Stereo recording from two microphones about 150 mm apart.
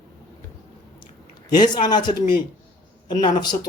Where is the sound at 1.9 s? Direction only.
30° left (ahead or behind).